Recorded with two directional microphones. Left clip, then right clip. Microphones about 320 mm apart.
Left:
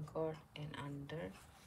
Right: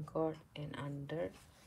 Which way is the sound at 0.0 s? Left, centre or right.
Centre.